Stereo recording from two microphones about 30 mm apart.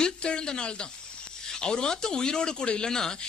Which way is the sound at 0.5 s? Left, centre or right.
Left.